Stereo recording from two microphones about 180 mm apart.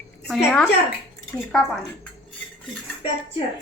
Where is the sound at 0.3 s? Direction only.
5° left (ahead or behind).